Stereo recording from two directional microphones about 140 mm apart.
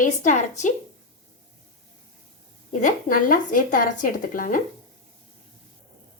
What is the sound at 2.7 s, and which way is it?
A woman's voice, 60° left (ahead or behind).